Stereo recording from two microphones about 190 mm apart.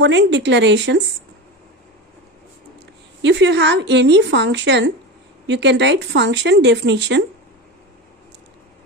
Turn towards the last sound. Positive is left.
turn(degrees=-70)  # may be behind; listen again after turning